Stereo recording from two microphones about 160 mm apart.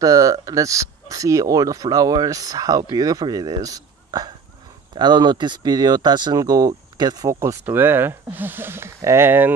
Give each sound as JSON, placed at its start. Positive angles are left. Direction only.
{"t": 0.0, "sound": "speech", "side_deg": -20}